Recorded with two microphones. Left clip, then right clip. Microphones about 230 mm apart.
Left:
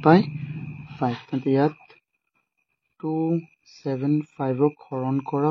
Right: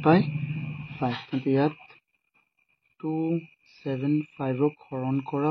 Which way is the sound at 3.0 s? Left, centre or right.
Left.